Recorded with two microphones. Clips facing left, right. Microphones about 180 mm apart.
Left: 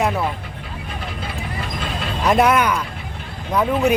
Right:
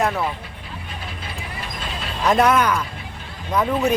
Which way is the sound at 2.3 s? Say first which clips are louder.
Left 1 dB; 10° left (ahead or behind).